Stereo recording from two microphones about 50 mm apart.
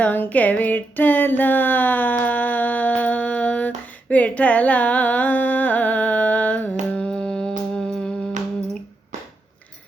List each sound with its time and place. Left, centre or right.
0.3 s a sound: left
4.1 s music: left
6.9 s music: centre
7.9 s humming: centre